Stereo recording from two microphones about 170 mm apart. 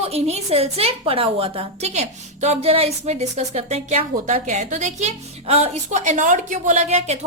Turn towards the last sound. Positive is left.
turn(degrees=-40)  # may be behind; listen again after turning